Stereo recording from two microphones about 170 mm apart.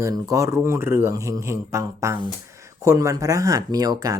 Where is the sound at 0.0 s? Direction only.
20° right (ahead or behind).